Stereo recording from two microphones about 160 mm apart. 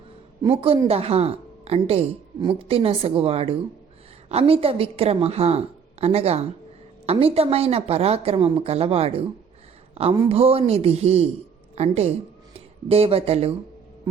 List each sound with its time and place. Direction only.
0.4 s a woman's voice: 35° right (ahead or behind)